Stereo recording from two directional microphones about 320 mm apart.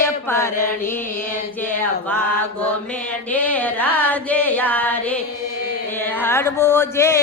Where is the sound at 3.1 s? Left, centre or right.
Centre.